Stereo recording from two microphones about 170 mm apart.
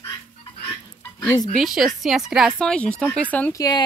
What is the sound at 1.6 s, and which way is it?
Speech, centre (ahead or behind).